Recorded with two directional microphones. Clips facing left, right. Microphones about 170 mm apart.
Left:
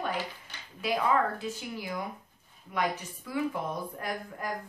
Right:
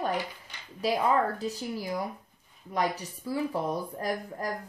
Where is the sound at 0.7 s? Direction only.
40° right (ahead or behind).